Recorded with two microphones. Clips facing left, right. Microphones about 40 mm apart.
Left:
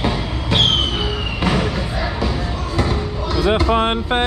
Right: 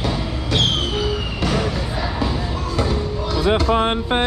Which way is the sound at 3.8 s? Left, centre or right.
Left.